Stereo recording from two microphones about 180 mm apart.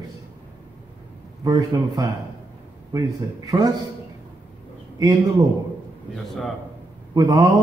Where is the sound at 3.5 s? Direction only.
25° right (ahead or behind).